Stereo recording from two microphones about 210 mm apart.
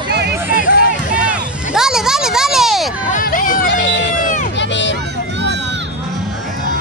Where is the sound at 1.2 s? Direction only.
5° right (ahead or behind).